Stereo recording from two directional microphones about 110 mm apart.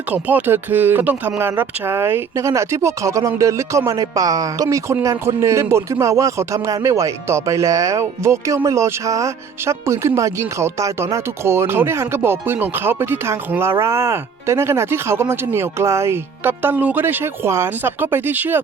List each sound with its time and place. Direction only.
0.1 s speech: 15° right (ahead or behind)